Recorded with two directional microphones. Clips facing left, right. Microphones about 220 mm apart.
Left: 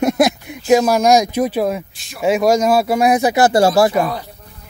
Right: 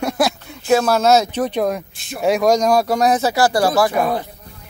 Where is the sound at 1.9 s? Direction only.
50° right (ahead or behind).